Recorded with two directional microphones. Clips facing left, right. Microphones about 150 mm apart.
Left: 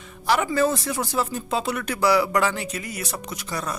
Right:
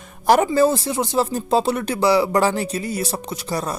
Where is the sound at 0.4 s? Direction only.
30° right (ahead or behind).